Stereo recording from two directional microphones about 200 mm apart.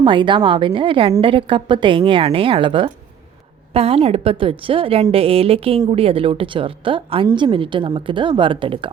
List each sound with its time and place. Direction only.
0.0 s a woman's voice: 25° right (ahead or behind)